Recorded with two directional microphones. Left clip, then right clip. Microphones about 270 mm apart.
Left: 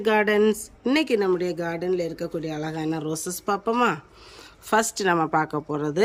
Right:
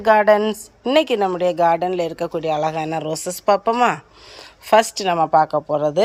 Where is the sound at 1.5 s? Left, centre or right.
Right.